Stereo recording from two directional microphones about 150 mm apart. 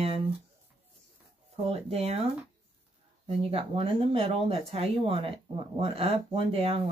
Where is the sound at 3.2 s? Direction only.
40° right (ahead or behind).